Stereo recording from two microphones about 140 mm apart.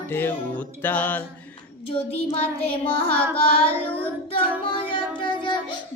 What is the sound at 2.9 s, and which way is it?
Child singing, 40° left (ahead or behind).